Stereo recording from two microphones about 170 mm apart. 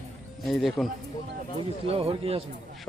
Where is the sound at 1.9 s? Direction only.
35° right (ahead or behind).